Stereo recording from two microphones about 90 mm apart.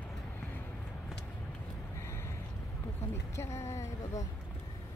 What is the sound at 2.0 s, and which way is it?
Vehicle, 30° left (ahead or behind).